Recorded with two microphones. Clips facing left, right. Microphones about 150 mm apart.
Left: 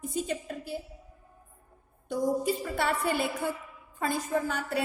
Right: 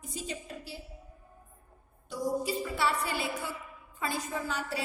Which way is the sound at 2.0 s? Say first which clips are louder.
Left 4 dB; 50° left (ahead or behind).